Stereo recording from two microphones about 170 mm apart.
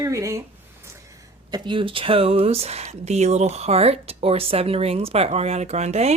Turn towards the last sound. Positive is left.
turn(degrees=-40)  # may be behind; listen again after turning